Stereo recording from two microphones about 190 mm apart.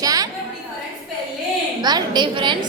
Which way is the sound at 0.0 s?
20° right (ahead or behind).